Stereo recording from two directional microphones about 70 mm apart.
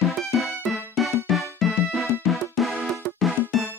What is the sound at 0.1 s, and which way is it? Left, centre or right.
Music, centre.